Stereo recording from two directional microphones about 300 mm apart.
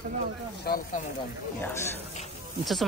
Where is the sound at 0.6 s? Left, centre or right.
Left.